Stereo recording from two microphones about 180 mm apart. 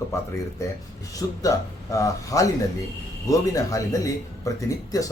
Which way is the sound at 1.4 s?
20° left (ahead or behind).